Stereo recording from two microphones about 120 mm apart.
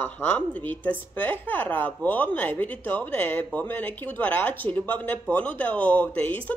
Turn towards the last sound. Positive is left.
turn(degrees=15)  # may be behind; listen again after turning